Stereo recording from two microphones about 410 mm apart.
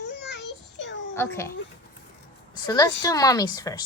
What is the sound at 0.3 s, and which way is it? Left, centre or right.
Child singing, left.